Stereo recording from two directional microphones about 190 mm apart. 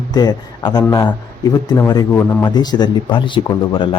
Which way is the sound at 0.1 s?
20° left (ahead or behind).